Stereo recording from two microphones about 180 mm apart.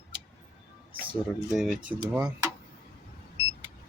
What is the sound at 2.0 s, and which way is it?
Speech, 15° right (ahead or behind).